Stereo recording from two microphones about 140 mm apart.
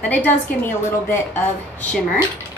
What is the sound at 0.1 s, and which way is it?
A woman's voice, 15° left (ahead or behind).